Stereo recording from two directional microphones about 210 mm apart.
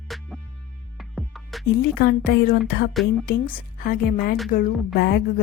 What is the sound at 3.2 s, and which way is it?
A woman's voice, 45° left (ahead or behind).